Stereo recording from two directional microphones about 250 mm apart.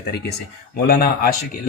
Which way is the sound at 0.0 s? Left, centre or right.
Left.